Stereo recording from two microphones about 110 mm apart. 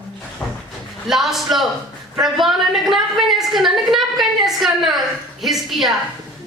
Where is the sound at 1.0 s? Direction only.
Centre (ahead or behind).